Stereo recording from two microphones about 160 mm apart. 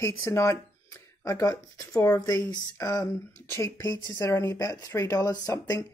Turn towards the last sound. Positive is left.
turn(degrees=20)  # may be behind; listen again after turning